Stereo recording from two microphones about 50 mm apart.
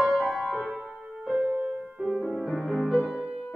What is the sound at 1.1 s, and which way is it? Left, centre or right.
Music, centre.